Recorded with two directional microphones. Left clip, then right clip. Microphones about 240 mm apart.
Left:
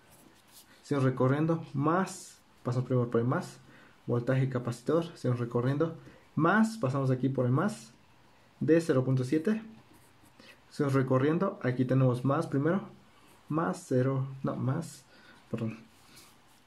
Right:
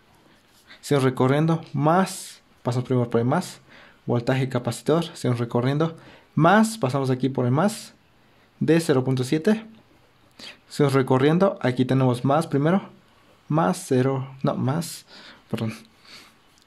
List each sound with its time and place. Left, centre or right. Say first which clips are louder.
0.8 s speech: right 8 dB; right